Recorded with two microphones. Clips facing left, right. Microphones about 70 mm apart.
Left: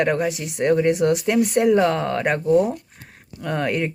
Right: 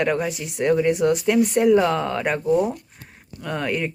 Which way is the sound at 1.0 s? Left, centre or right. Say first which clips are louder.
Even; left.